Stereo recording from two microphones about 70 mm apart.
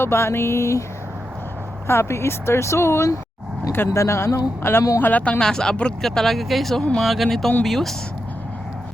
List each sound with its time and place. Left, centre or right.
0.0 s speech: left
1.9 s speech: left
4.9 s speech: left
5.4 s speech: centre